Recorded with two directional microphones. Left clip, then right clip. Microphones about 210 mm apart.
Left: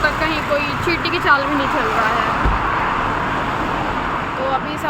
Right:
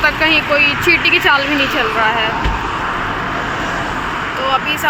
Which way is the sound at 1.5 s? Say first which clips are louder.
Right 3 dB; 45° left (ahead or behind).